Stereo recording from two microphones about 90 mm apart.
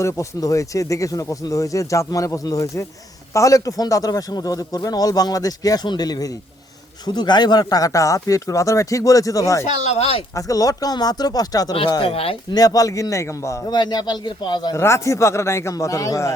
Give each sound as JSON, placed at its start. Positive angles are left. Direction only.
{"t": 0.0, "sound": "speech", "side_deg": 35}
{"t": 11.7, "sound": "a man's voice", "side_deg": 60}
{"t": 12.1, "sound": "speech", "side_deg": 90}
{"t": 12.5, "sound": "speech", "side_deg": 40}
{"t": 13.7, "sound": "a man's voice", "side_deg": 50}
{"t": 14.7, "sound": "speech", "side_deg": 30}